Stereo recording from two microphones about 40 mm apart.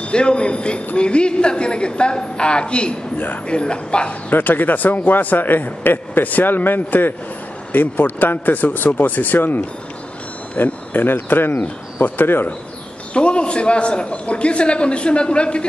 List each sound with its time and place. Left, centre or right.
0.0 s a man's voice: left
4.3 s a man's voice: left
10.6 s a man's voice: left
13.1 s a man's voice: left